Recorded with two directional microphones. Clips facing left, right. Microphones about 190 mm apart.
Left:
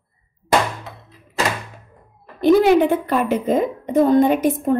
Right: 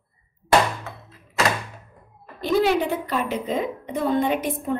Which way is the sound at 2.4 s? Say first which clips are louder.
Left 7 dB; 55° left (ahead or behind).